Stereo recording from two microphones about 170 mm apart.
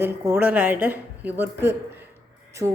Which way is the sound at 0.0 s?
15° right (ahead or behind).